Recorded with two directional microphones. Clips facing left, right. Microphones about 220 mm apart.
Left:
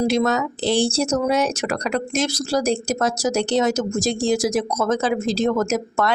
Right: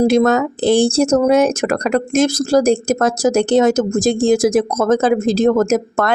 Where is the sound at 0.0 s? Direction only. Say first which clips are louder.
Right 7 dB; 50° right (ahead or behind).